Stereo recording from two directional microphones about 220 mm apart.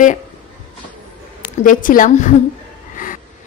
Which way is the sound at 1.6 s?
40° left (ahead or behind).